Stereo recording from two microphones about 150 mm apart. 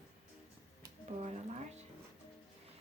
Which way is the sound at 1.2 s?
50° right (ahead or behind).